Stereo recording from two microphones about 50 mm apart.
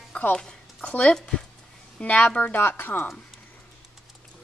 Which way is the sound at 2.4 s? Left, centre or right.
Left.